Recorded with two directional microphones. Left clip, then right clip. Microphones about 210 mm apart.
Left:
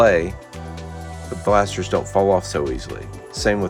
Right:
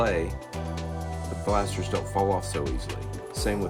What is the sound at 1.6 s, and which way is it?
Speech, 35° left (ahead or behind).